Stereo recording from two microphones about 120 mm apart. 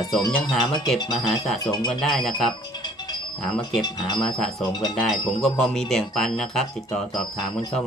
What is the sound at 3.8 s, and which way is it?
Speech, 35° left (ahead or behind).